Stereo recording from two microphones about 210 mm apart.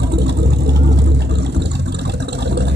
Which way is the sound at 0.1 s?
55° right (ahead or behind).